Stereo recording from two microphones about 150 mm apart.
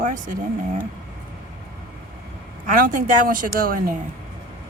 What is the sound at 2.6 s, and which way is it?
Speech, 65° right (ahead or behind).